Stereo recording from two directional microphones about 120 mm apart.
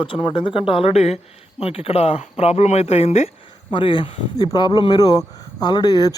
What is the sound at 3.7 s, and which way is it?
Speech, 40° left (ahead or behind).